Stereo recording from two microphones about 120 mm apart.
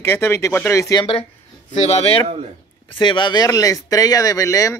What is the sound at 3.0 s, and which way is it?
Speech, 40° left (ahead or behind).